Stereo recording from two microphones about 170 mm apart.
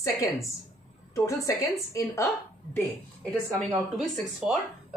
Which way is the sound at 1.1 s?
20° left (ahead or behind).